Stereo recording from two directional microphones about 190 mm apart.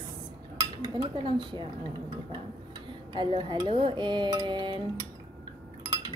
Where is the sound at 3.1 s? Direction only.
25° right (ahead or behind).